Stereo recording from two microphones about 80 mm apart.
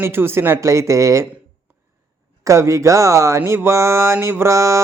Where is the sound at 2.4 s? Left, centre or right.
Right.